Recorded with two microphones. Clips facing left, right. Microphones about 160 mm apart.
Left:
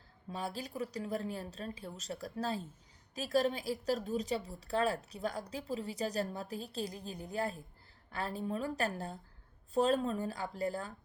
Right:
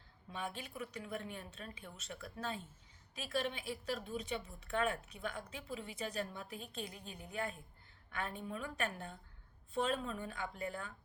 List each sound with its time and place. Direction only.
0.3 s a woman's voice: 35° left (ahead or behind)